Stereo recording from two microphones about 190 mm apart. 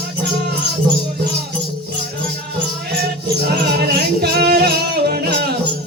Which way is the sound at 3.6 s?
60° right (ahead or behind).